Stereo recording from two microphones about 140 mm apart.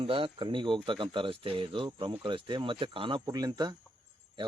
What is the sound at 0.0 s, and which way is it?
A man's voice, 40° right (ahead or behind).